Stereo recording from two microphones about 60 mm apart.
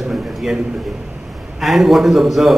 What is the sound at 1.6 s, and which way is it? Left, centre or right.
Speech, centre.